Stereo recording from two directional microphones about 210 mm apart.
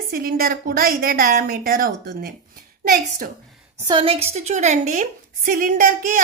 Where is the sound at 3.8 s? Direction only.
25° right (ahead or behind).